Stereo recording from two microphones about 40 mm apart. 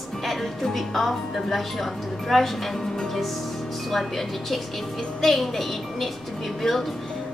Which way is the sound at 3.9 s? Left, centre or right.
Centre.